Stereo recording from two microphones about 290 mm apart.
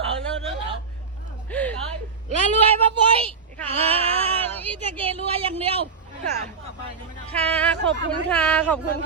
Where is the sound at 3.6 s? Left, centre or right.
Centre.